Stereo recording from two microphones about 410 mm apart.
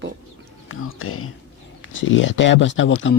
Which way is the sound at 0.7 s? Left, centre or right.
Left.